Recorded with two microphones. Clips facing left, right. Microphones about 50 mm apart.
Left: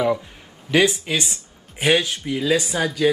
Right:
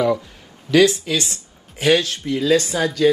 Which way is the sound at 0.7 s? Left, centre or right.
Left.